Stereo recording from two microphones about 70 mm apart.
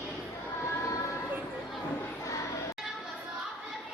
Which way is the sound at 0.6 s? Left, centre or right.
Left.